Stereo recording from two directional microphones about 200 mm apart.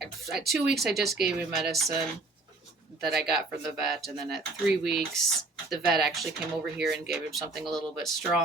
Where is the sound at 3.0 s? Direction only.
Centre (ahead or behind).